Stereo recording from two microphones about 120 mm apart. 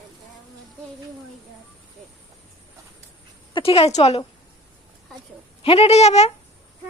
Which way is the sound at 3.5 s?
55° left (ahead or behind).